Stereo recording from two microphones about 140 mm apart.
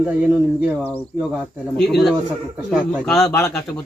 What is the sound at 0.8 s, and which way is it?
Speech, 15° left (ahead or behind).